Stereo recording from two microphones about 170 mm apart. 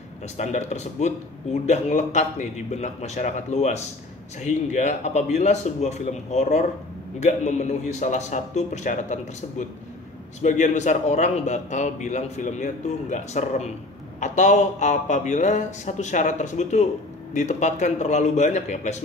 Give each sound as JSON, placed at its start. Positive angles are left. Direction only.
{"t": 0.4, "sound": "a man's voice", "side_deg": 45}